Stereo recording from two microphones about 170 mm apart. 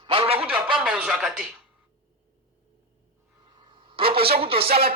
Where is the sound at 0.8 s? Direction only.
5° right (ahead or behind).